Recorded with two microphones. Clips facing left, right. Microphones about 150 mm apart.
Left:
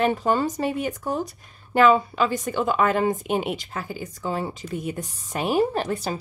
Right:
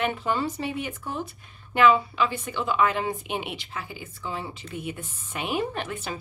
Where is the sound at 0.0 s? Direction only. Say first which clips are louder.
Left 5 dB; 40° left (ahead or behind).